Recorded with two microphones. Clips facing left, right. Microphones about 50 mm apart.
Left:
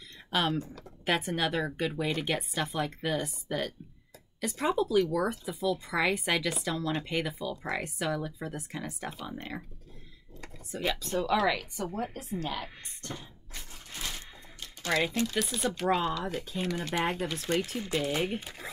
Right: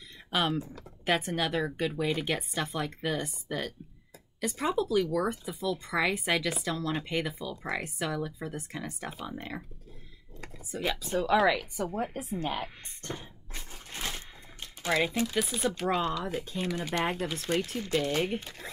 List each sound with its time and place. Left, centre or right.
0.3 s speech: centre
10.7 s a woman's voice: centre; by 12.6 s right
13.0 s a sound: right
14.9 s speech: centre